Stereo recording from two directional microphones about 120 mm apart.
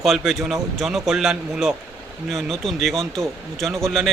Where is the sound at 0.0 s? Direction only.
Centre (ahead or behind).